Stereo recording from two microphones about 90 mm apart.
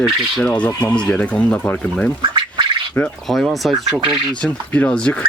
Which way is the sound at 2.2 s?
60° right (ahead or behind).